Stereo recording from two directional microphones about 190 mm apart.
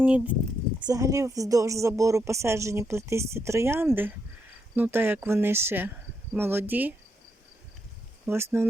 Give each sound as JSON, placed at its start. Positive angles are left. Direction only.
{"t": 0.0, "sound": "speech", "side_deg": -5}
{"t": 0.9, "sound": "speech", "side_deg": -15}
{"t": 8.3, "sound": "speech", "side_deg": -10}